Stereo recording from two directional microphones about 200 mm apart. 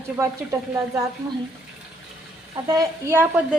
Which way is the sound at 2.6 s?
15° right (ahead or behind).